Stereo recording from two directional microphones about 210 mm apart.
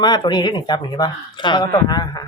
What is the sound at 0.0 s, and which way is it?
Speech, 20° left (ahead or behind).